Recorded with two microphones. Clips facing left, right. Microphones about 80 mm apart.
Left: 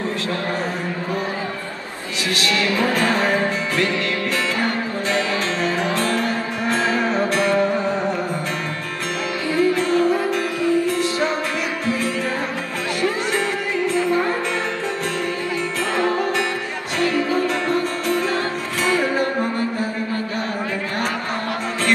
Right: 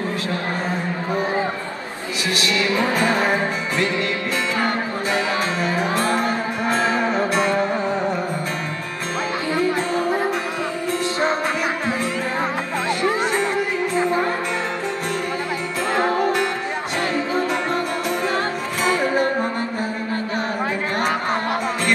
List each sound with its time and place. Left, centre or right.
2.4 s music: right
5.6 s music: right
9.6 s music: right
11.8 s music: right
17.0 s music: right
18.9 s music: right